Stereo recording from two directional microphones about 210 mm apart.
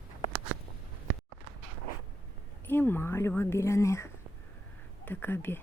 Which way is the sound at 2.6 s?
10° left (ahead or behind).